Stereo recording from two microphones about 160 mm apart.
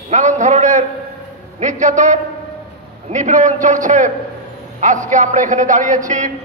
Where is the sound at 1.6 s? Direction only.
50° right (ahead or behind).